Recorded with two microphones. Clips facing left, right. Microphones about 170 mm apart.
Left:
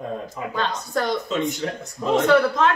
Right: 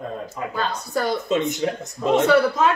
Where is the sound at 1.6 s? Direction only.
20° right (ahead or behind).